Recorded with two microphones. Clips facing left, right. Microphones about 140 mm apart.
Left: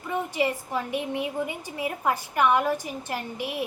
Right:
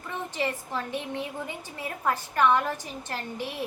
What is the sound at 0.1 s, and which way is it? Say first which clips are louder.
A woman's voice: left 5 dB; 10° left (ahead or behind).